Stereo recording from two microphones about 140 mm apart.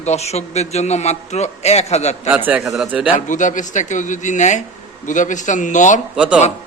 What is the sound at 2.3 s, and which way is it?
Speech, 15° right (ahead or behind).